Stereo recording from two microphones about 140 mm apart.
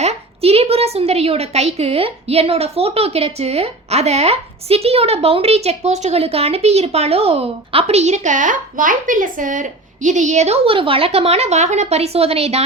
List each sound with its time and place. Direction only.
0.0 s a woman's voice: 45° right (ahead or behind)